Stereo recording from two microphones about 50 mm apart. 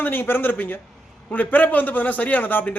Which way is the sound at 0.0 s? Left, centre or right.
Left.